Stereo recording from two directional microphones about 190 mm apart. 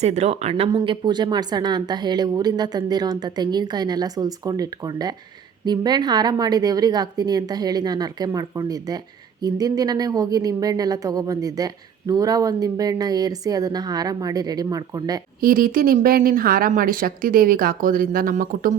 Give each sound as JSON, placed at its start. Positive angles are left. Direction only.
{"t": 0.0, "sound": "speech", "side_deg": -35}
{"t": 15.4, "sound": "a woman's voice", "side_deg": -50}